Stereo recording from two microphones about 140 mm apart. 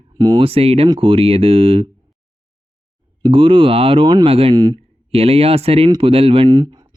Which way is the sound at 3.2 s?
40° right (ahead or behind).